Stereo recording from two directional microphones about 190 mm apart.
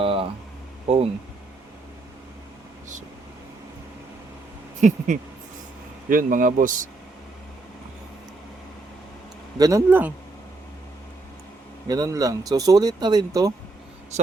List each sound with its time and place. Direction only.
0.0 s a sound: 30° right (ahead or behind)
0.9 s speech: 30° right (ahead or behind)
4.8 s a man's voice: 40° right (ahead or behind)
9.6 s speech: 15° right (ahead or behind)
11.9 s speech: 20° right (ahead or behind)